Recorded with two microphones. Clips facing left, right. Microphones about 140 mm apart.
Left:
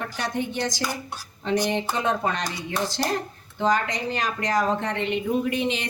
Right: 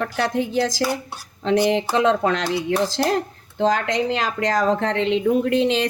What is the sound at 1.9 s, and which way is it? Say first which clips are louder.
A woman's voice: right 7 dB; 90° right.